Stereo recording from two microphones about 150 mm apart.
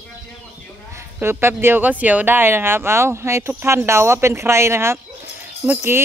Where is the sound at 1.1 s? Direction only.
15° right (ahead or behind).